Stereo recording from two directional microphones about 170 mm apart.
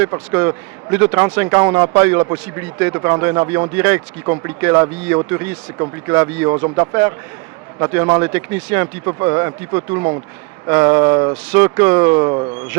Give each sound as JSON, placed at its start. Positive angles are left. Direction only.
{"t": 0.3, "sound": "a man's voice", "side_deg": -15}
{"t": 3.8, "sound": "a man's voice", "side_deg": -15}
{"t": 12.1, "sound": "speech", "side_deg": -30}